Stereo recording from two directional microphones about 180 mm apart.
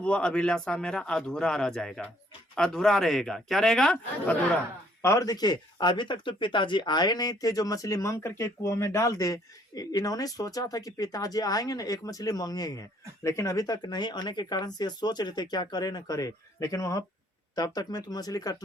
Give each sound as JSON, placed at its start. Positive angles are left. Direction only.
{"t": 0.0, "sound": "a man's voice", "side_deg": 5}
{"t": 5.0, "sound": "speech", "side_deg": 20}